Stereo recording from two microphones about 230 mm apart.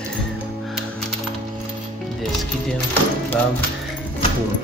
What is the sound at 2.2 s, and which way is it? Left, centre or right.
Speech, centre.